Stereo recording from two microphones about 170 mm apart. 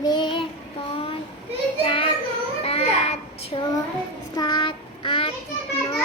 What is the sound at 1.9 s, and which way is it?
Speech, 30° left (ahead or behind).